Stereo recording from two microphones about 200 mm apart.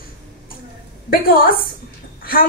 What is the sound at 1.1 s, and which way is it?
Speech, 45° left (ahead or behind).